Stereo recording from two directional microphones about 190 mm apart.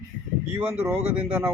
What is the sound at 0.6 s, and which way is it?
Speech, 10° right (ahead or behind).